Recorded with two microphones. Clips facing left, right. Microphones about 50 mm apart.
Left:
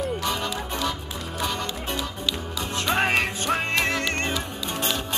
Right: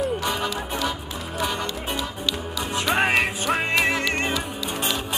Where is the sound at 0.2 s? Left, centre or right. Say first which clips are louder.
Right 2 dB; centre.